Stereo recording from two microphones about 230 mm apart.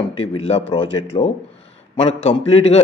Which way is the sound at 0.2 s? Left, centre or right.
Left.